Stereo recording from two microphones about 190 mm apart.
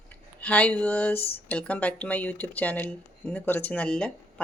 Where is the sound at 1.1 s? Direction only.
30° left (ahead or behind).